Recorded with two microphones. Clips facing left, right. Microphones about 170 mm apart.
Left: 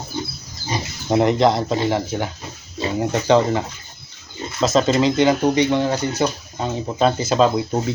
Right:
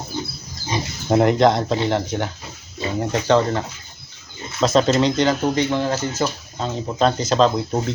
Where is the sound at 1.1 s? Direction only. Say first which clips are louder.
Right 1 dB; centre (ahead or behind).